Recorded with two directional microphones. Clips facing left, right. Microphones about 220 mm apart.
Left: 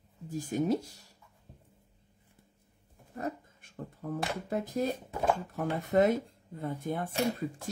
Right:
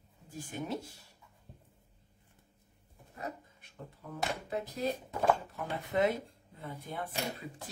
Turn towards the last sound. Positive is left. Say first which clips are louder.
# left 7 dB
turn(degrees=45)  # may be behind; listen again after turning